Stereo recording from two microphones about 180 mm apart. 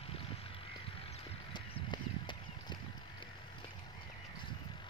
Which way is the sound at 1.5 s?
25° left (ahead or behind).